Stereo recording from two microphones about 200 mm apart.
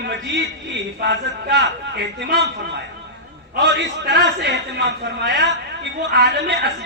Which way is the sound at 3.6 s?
60° right (ahead or behind).